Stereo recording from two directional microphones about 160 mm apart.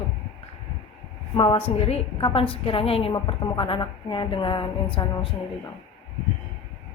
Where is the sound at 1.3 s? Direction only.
35° left (ahead or behind).